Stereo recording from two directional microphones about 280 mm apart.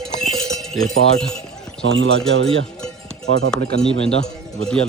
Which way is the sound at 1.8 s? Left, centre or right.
Right.